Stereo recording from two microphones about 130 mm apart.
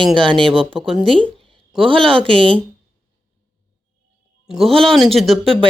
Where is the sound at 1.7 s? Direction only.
45° right (ahead or behind).